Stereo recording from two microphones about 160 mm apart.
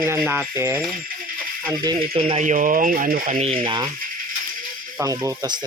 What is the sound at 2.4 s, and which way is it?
Speech, 55° right (ahead or behind).